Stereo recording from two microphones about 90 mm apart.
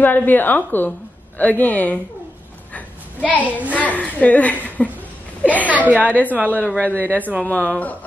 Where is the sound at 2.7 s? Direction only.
15° left (ahead or behind).